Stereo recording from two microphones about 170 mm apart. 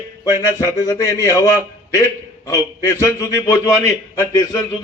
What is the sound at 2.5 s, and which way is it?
A man's voice, 20° left (ahead or behind).